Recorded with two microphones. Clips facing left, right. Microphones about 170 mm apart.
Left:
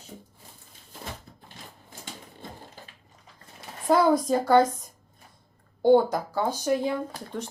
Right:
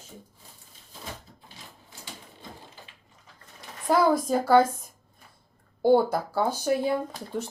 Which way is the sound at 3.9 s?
Centre (ahead or behind).